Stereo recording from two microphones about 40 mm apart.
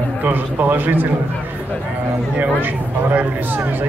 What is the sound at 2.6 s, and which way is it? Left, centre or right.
Speech, right.